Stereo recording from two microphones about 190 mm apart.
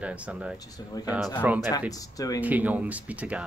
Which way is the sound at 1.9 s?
20° left (ahead or behind).